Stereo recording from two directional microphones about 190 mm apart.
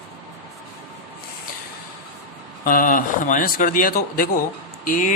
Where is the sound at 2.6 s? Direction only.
50° left (ahead or behind).